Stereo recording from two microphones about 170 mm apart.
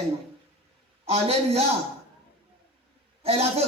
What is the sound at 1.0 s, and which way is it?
Speech, 35° right (ahead or behind).